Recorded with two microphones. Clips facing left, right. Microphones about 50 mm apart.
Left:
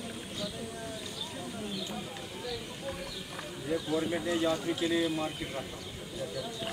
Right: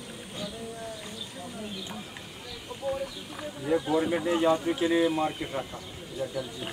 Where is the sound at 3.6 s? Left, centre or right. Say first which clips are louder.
Right 6 dB; right.